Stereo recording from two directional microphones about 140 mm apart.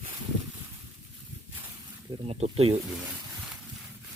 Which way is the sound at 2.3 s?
45° right (ahead or behind).